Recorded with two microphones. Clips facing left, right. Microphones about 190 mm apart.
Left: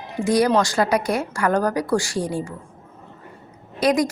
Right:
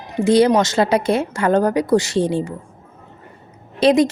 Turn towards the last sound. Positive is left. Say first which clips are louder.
# right 5 dB
turn(degrees=-25)  # may be behind; listen again after turning